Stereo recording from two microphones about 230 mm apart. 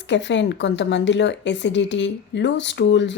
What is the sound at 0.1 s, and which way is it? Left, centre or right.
A woman's voice, left.